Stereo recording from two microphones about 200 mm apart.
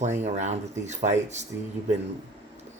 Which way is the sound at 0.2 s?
35° right (ahead or behind).